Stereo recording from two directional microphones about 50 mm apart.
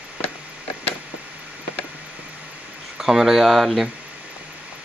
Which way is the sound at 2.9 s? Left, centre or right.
Centre.